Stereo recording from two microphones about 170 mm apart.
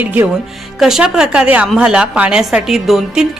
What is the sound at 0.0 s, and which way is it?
A woman's voice, 10° right (ahead or behind).